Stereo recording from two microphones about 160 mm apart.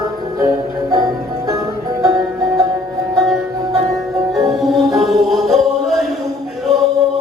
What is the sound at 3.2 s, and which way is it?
Music, centre (ahead or behind).